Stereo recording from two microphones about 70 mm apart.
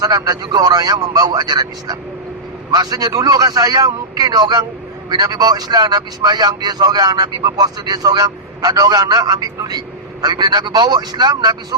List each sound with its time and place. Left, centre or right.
0.0 s speech: right